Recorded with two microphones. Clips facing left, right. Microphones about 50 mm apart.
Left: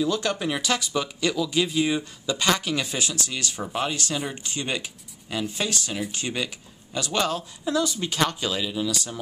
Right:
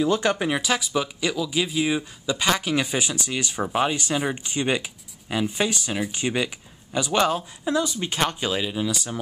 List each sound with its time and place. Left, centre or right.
0.0 s speech: right